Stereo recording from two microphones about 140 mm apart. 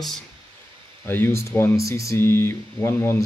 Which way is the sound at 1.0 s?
15° left (ahead or behind).